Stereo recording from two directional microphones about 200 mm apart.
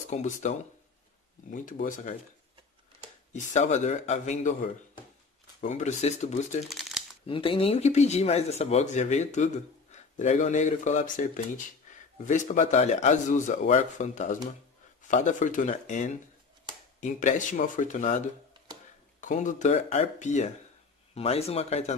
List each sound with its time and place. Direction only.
0.1 s speech: 35° left (ahead or behind)
3.3 s speech: 35° left (ahead or behind)
6.6 s shuffling cards: centre (ahead or behind)
7.2 s speech: 25° left (ahead or behind)